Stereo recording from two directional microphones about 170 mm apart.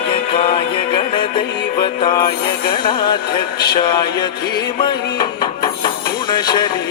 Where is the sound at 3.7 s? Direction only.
25° left (ahead or behind).